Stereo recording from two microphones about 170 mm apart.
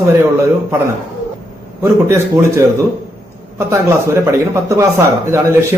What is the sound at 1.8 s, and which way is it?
Speech, 15° right (ahead or behind).